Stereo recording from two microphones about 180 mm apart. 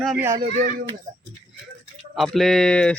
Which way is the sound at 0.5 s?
50° right (ahead or behind).